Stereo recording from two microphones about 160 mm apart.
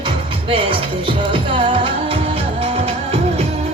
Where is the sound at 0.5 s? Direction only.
35° right (ahead or behind).